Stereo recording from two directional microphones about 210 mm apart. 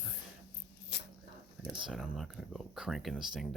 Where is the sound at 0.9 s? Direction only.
55° left (ahead or behind).